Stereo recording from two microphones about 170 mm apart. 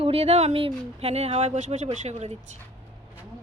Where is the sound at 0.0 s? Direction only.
35° right (ahead or behind).